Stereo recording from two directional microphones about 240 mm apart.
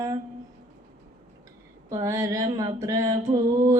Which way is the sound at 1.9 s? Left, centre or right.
Centre.